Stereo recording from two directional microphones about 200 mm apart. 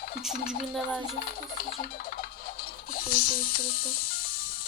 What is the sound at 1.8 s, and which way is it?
Music, 50° left (ahead or behind).